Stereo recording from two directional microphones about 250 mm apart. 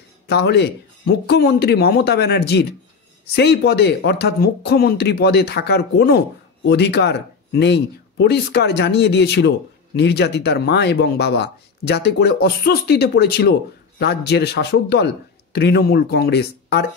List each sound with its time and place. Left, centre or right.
0.3 s speech: left